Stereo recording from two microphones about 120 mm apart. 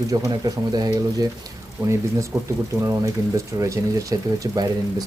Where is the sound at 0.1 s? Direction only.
30° right (ahead or behind).